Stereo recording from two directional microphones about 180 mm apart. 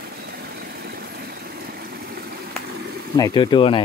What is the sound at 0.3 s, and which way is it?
Vehicle, 60° right (ahead or behind).